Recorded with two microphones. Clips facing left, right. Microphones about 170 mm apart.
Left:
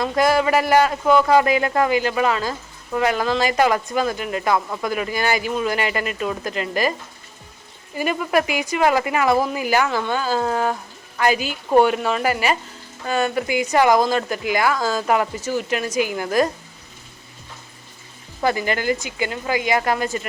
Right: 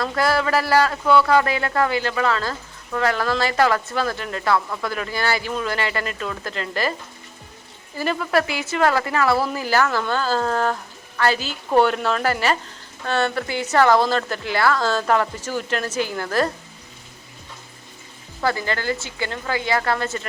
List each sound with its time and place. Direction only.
0.0 s a man's voice: 20° left (ahead or behind)
7.9 s a man's voice: 15° left (ahead or behind)
18.4 s a man's voice: 15° left (ahead or behind)